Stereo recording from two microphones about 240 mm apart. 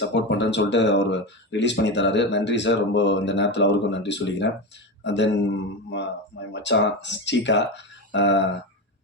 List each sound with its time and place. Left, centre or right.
0.0 s speech: left